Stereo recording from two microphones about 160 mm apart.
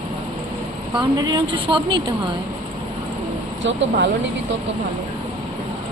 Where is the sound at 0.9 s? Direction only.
25° right (ahead or behind).